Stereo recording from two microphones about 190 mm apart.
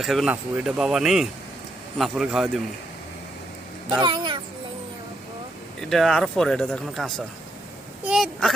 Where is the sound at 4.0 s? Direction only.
25° right (ahead or behind).